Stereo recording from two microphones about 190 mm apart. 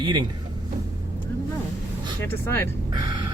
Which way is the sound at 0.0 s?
25° right (ahead or behind).